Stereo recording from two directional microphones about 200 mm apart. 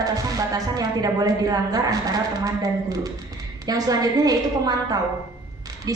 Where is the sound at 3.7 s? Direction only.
20° right (ahead or behind).